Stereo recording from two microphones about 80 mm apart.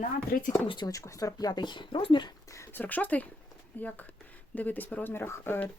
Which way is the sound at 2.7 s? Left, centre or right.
Left.